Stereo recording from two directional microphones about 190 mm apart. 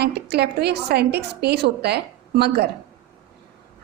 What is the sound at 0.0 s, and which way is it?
A woman's voice, 60° right (ahead or behind).